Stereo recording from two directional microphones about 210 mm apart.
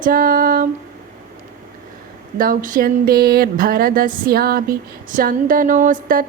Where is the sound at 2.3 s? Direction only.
40° right (ahead or behind).